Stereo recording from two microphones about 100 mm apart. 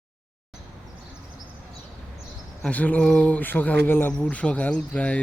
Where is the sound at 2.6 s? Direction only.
15° left (ahead or behind).